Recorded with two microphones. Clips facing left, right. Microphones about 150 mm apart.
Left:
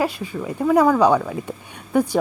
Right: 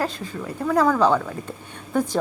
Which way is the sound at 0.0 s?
10° left (ahead or behind).